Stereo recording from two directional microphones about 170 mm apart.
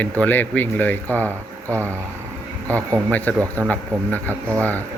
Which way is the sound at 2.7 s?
10° left (ahead or behind).